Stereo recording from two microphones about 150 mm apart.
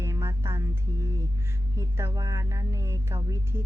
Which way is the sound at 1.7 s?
15° right (ahead or behind).